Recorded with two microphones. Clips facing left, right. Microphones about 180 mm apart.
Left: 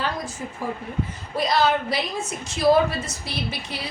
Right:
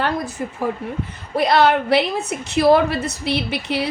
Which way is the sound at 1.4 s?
65° right (ahead or behind).